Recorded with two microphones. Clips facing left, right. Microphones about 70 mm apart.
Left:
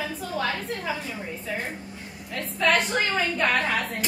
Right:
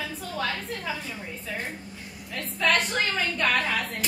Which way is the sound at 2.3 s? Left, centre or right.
Centre.